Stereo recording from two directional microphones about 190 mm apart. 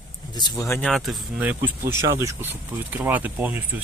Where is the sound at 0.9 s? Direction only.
Centre (ahead or behind).